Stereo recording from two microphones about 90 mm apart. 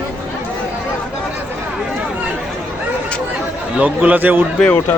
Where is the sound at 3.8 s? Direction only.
15° right (ahead or behind).